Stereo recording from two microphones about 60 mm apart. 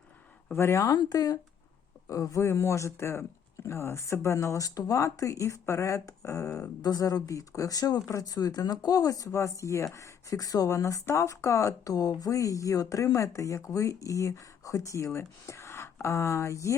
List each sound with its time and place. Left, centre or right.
0.5 s speech: left
0.9 s speech: left
2.0 s speech: left
6.8 s speech: left
10.8 s speech: left